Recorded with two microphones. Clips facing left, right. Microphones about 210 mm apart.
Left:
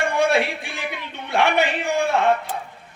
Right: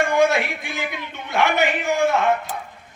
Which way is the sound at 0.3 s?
30° left (ahead or behind).